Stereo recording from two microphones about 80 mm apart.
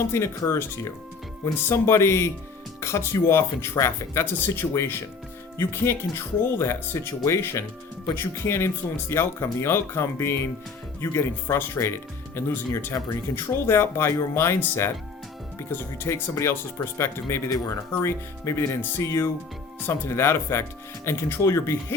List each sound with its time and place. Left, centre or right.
0.1 s speech: left